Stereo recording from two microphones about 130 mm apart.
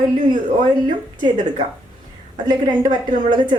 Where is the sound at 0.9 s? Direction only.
35° right (ahead or behind).